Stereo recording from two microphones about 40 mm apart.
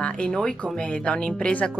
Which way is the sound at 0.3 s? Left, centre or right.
Centre.